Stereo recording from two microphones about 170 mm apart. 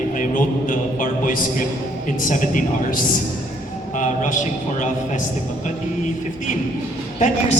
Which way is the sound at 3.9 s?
50° left (ahead or behind).